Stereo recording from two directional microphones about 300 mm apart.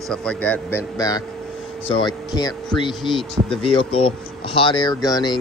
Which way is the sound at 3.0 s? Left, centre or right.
Centre.